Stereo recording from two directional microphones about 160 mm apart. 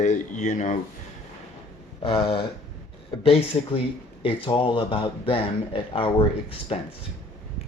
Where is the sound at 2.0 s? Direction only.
35° left (ahead or behind).